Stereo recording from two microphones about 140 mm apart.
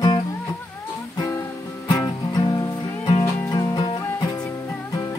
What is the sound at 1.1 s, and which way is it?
Music, 25° left (ahead or behind).